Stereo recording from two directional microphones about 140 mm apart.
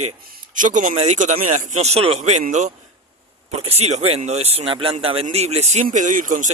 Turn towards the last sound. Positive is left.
turn(degrees=-65)  # may be behind; listen again after turning